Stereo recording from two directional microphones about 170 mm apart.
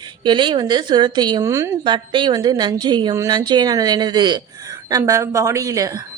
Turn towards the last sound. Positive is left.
turn(degrees=-20)  # may be behind; listen again after turning